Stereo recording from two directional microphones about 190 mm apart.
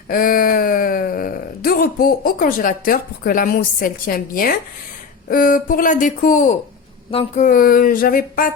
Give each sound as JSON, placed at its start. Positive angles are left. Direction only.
{"t": 0.1, "sound": "speech", "side_deg": 45}
{"t": 7.1, "sound": "a sound", "side_deg": 30}
{"t": 7.4, "sound": "speech", "side_deg": 45}